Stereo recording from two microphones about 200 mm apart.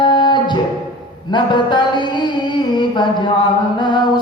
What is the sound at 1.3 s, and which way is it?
Mantra, 25° left (ahead or behind).